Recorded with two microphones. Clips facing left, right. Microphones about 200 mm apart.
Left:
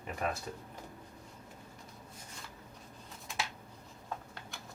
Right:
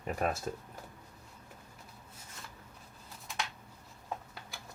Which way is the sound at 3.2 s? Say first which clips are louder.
Even; 5° left (ahead or behind).